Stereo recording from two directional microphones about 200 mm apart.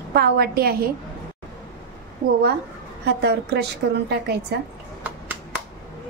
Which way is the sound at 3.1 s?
55° right (ahead or behind).